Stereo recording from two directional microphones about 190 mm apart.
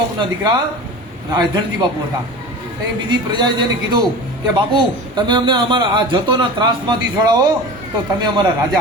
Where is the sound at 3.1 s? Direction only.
20° right (ahead or behind).